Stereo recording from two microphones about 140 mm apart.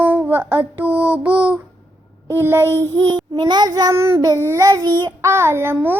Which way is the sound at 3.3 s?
30° right (ahead or behind).